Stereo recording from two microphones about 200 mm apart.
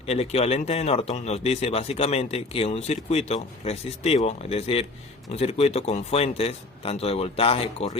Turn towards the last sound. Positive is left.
turn(degrees=30)  # may be behind; listen again after turning